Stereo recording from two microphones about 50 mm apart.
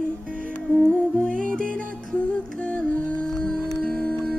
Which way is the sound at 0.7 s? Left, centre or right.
Centre.